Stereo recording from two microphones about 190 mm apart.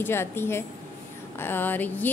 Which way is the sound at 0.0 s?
10° left (ahead or behind).